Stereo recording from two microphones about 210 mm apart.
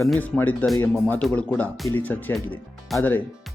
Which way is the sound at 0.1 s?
5° left (ahead or behind).